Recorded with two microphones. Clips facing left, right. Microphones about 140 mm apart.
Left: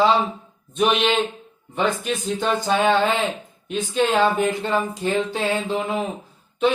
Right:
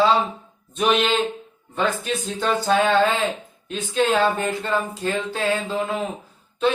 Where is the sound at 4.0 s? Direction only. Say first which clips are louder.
Left 1 dB; 15° left (ahead or behind).